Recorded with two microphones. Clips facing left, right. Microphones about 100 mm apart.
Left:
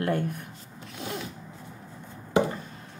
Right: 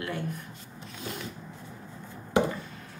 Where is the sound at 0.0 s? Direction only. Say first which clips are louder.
Left 6 dB; 50° left (ahead or behind).